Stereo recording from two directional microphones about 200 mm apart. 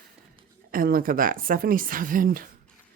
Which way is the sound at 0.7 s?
45° right (ahead or behind).